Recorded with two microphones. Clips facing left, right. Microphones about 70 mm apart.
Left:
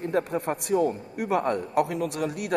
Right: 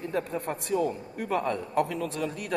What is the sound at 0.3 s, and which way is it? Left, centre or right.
A man's voice, left.